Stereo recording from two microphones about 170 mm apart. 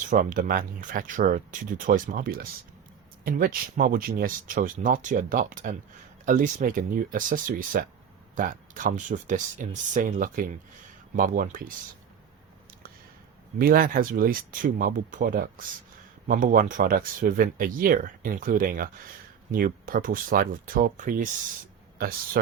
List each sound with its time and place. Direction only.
0.1 s speech: 50° right (ahead or behind)
13.6 s speech: 55° right (ahead or behind)
21.9 s speech: 60° right (ahead or behind)